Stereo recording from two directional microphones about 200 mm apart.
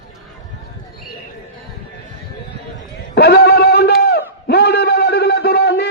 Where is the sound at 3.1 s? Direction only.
55° left (ahead or behind).